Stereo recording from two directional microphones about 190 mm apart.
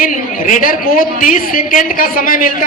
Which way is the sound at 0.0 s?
45° left (ahead or behind).